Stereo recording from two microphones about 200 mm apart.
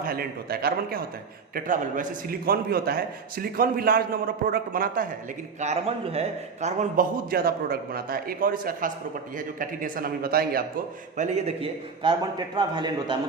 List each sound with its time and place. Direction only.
0.0 s a man's voice: 50° right (ahead or behind)
5.5 s a man's voice: 35° right (ahead or behind); by 10.6 s 50° right (ahead or behind)
11.2 s a man's voice: 35° right (ahead or behind)